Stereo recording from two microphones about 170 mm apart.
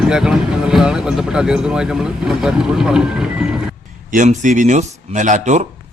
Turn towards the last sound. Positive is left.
turn(degrees=-45)  # may be behind; listen again after turning